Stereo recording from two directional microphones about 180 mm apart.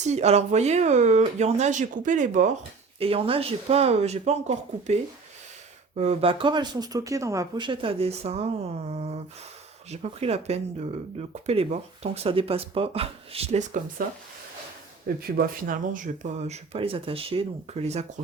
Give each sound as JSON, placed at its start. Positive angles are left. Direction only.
{"t": 0.0, "sound": "speech", "side_deg": -40}
{"t": 3.0, "sound": "speech", "side_deg": -30}
{"t": 6.0, "sound": "speech", "side_deg": -35}
{"t": 15.2, "sound": "speech", "side_deg": -55}